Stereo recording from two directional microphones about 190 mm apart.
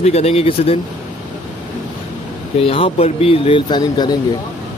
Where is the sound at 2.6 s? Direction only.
30° left (ahead or behind).